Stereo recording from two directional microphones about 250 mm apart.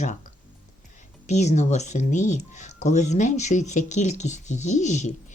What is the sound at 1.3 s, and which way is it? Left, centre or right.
Speech, left.